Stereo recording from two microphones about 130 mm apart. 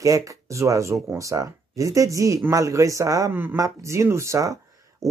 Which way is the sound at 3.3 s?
15° right (ahead or behind).